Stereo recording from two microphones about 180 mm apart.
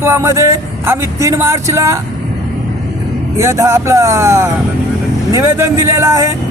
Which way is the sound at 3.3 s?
15° right (ahead or behind).